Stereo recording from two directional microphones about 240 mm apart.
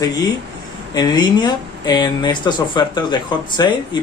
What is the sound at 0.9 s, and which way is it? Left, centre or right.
Speech, centre.